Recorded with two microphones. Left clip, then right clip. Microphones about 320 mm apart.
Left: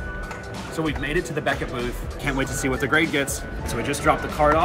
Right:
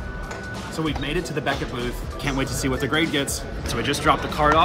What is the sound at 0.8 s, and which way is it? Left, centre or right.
Speech, centre.